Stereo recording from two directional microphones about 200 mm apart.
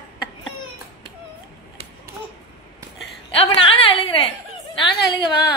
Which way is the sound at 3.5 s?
25° left (ahead or behind).